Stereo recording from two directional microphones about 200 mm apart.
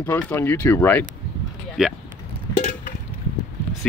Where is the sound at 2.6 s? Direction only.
45° left (ahead or behind).